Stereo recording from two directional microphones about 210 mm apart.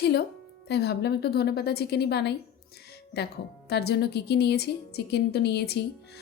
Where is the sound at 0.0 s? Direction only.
50° left (ahead or behind).